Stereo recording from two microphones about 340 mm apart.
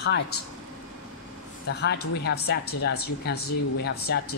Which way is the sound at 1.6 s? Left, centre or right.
Left.